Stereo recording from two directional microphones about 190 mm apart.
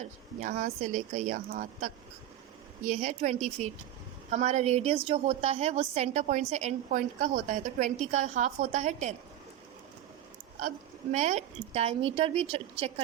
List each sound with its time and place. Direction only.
0.0 s a woman's voice: 40° right (ahead or behind)
11.1 s a woman's voice: 35° right (ahead or behind)